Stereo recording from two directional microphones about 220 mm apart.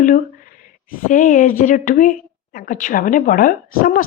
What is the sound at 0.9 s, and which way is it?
A woman's voice, 35° left (ahead or behind).